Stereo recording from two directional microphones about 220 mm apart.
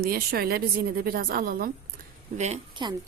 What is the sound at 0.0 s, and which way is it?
A woman's voice, 45° right (ahead or behind).